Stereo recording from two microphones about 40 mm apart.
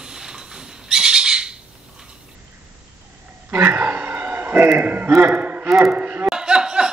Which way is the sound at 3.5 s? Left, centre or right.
Right.